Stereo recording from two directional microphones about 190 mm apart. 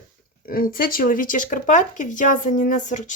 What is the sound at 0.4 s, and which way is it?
Speech, 50° left (ahead or behind).